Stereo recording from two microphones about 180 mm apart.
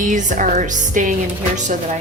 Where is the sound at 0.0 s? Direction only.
45° right (ahead or behind).